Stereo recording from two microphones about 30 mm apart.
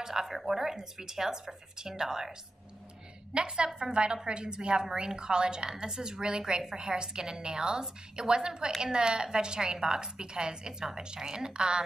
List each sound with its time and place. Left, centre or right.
0.0 s speech: centre
3.3 s a woman's voice: right